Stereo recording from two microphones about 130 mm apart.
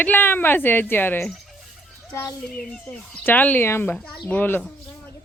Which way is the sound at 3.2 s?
10° left (ahead or behind).